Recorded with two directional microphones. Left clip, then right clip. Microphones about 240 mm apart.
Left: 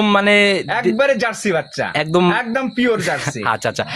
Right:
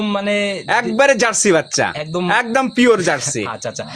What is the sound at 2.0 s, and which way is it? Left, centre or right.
Speech, left.